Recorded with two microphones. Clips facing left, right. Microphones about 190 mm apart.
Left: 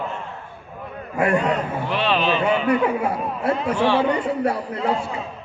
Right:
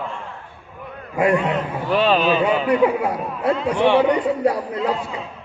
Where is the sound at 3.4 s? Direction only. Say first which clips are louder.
Right 3 dB; 20° right (ahead or behind).